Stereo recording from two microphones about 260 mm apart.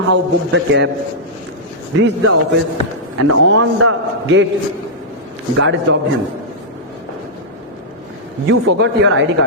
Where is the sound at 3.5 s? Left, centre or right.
Right.